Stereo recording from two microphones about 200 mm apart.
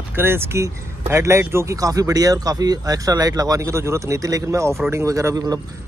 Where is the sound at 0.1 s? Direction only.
10° right (ahead or behind).